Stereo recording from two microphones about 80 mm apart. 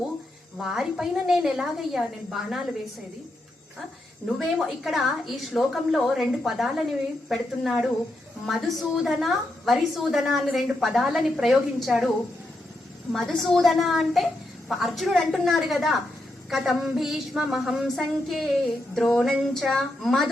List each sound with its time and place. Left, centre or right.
0.6 s a woman's voice: centre
4.4 s a woman's voice: centre
13.1 s a woman's voice: centre